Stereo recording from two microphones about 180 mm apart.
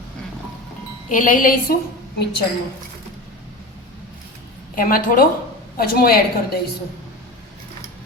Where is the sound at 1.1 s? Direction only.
45° left (ahead or behind).